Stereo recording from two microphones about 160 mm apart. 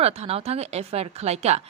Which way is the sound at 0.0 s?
40° right (ahead or behind).